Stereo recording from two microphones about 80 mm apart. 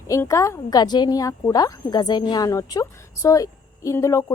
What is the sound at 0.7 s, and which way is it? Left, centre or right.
A woman's voice, left.